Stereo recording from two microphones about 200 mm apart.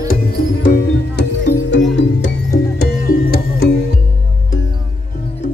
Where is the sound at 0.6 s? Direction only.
55° left (ahead or behind).